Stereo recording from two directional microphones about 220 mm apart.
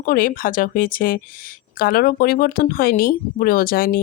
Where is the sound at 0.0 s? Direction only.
40° left (ahead or behind).